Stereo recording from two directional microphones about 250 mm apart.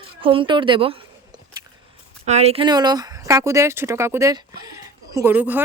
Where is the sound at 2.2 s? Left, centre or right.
Right.